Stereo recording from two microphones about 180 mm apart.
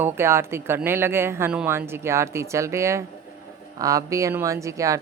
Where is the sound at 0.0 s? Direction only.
15° right (ahead or behind).